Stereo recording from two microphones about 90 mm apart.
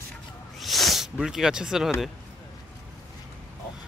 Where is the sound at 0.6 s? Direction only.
Centre (ahead or behind).